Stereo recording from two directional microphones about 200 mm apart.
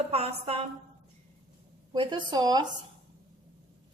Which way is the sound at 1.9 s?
20° right (ahead or behind).